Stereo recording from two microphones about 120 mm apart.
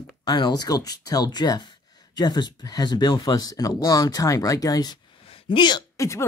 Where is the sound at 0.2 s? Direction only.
35° left (ahead or behind).